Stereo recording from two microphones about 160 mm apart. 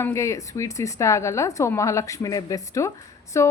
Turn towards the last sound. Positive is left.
turn(degrees=15)  # may be behind; listen again after turning